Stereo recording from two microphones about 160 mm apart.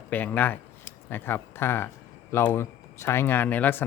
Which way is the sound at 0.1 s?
10° left (ahead or behind).